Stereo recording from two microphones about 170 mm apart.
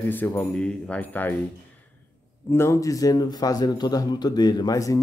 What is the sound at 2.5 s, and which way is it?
A man's voice, 15° left (ahead or behind).